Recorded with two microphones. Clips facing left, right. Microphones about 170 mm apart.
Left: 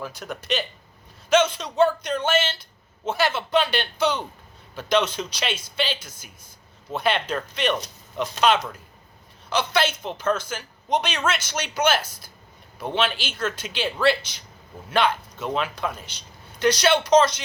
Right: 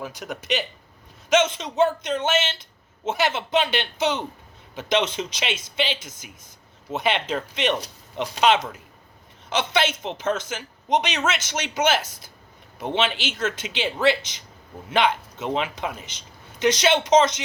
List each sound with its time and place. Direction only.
0.0 s speech: 15° right (ahead or behind)